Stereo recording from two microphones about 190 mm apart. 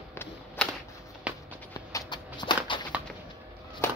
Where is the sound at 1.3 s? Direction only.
5° right (ahead or behind).